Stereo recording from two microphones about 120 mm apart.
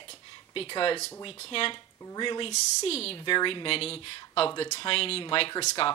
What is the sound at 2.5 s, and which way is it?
Speech, 60° left (ahead or behind).